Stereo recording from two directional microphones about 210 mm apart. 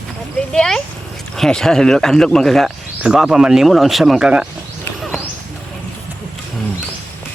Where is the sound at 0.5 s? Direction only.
Centre (ahead or behind).